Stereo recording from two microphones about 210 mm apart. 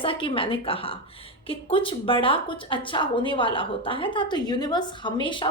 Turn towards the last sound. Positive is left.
turn(degrees=25)  # may be behind; listen again after turning